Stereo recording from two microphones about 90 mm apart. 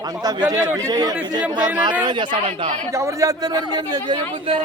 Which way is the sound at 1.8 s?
55° right (ahead or behind).